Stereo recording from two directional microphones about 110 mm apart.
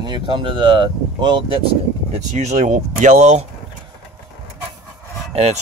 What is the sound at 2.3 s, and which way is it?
Speech, 90° right.